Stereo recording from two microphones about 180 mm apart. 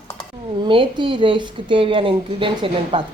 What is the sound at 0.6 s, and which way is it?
A woman's voice, 25° right (ahead or behind).